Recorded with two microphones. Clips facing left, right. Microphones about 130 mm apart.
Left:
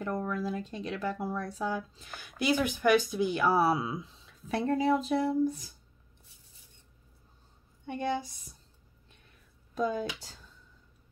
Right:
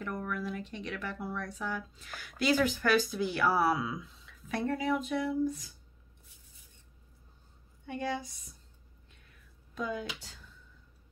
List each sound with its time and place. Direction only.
0.0 s speech: 30° left (ahead or behind)
7.8 s speech: 25° left (ahead or behind)
9.8 s speech: 35° left (ahead or behind)